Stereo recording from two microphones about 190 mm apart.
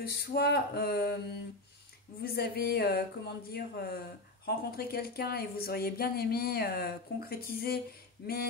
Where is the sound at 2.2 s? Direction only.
55° left (ahead or behind).